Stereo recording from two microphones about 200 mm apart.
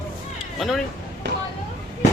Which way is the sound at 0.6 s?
Centre (ahead or behind).